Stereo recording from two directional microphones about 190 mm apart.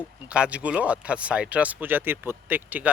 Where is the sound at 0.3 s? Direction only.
5° right (ahead or behind).